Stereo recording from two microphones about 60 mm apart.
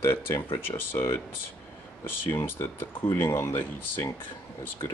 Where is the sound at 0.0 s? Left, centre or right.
Left.